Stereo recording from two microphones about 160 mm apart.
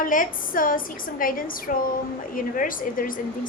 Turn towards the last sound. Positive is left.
turn(degrees=60)  # may be behind; listen again after turning